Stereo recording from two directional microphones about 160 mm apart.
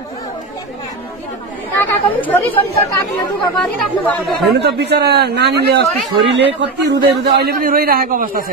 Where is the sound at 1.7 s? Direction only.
10° left (ahead or behind).